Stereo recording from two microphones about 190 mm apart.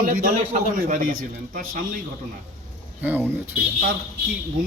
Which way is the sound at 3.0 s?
10° right (ahead or behind).